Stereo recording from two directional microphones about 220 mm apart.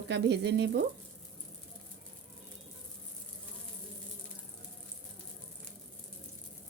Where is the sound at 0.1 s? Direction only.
50° right (ahead or behind).